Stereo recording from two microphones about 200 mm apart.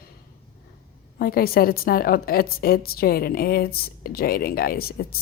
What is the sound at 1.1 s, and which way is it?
A woman's voice, 50° left (ahead or behind).